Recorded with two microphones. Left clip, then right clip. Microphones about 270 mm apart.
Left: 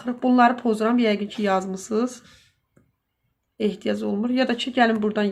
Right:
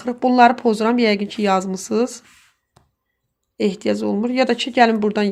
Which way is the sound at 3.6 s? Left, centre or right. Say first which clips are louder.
Right 5 dB; right.